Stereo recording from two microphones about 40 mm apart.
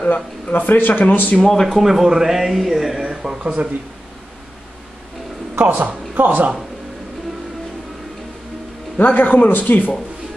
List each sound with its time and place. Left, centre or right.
0.1 s speech: left
1.5 s speech: centre
1.8 s speech: centre
3.1 s speech: centre
5.6 s a woman's voice: right
9.0 s speech: left